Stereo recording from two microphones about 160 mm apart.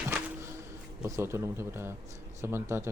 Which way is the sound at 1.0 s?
15° right (ahead or behind).